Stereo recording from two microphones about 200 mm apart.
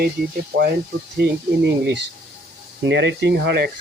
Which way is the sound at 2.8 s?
60° right (ahead or behind).